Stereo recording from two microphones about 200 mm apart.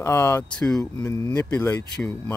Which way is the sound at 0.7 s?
15° left (ahead or behind).